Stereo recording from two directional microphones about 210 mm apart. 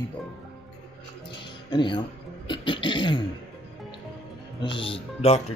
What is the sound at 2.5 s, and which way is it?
Cough, 25° left (ahead or behind).